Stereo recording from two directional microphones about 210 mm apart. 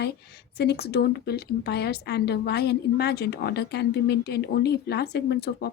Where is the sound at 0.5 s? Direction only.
50° left (ahead or behind).